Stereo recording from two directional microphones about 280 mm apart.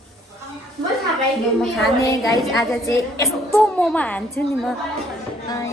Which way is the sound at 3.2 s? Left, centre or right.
Centre.